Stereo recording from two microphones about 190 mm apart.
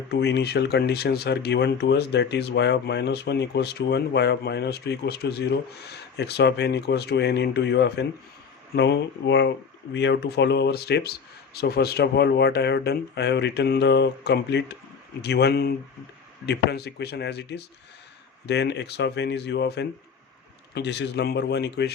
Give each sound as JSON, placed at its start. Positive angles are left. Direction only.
{"t": 0.1, "sound": "speech", "side_deg": 60}